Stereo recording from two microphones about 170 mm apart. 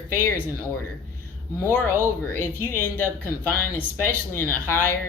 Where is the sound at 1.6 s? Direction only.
15° left (ahead or behind).